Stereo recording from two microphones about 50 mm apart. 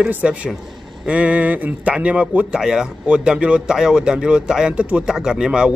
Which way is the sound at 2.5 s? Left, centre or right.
Centre.